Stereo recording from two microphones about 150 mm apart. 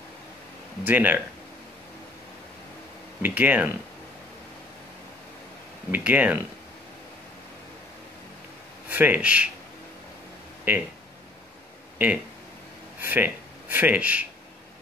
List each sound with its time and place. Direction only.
0.8 s speech: 10° right (ahead or behind)
3.2 s speech: 10° right (ahead or behind)
5.9 s speech: 10° right (ahead or behind)
8.8 s speech: 10° right (ahead or behind)
10.7 s speech: 10° right (ahead or behind)
13.0 s speech: 15° right (ahead or behind)